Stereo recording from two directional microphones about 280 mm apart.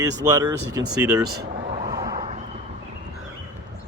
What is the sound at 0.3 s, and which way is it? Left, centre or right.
Speech, centre.